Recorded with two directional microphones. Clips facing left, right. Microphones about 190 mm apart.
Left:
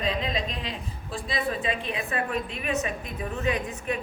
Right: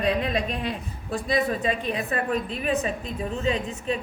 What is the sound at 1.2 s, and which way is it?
A woman's voice, 45° right (ahead or behind).